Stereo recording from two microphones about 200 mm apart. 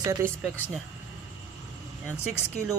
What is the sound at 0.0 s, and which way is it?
Speech, 15° right (ahead or behind).